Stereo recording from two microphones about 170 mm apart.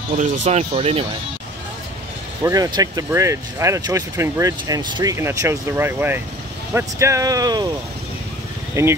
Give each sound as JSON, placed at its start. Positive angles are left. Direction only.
{"t": 0.2, "sound": "speech", "side_deg": -40}
{"t": 2.4, "sound": "speech", "side_deg": -20}
{"t": 8.8, "sound": "speech", "side_deg": -15}